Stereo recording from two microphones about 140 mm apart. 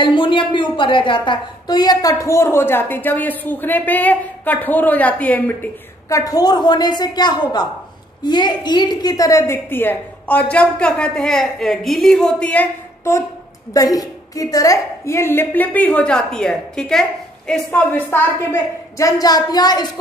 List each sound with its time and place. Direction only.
0.0 s a woman's voice: 35° left (ahead or behind); by 12.6 s 10° left (ahead or behind)
13.7 s a woman's voice: 25° left (ahead or behind); by 17.8 s 5° left (ahead or behind)
17.9 s a woman's voice: 15° left (ahead or behind)